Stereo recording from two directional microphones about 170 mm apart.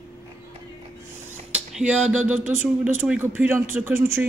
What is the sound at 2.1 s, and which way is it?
A man's voice, 10° right (ahead or behind).